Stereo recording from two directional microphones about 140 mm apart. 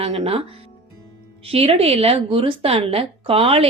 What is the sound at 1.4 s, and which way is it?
A woman's voice, 45° right (ahead or behind).